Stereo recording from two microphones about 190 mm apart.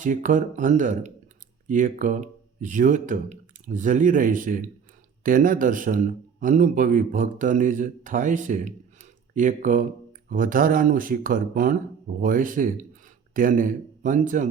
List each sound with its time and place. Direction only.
0.0 s a man's voice: 45° right (ahead or behind)